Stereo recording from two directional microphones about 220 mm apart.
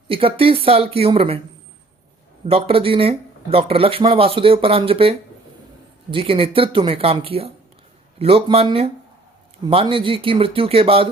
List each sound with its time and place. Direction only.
0.1 s speech: 25° right (ahead or behind)
2.5 s speech: 25° right (ahead or behind)